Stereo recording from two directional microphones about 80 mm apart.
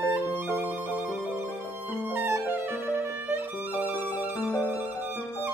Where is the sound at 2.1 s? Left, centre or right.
Right.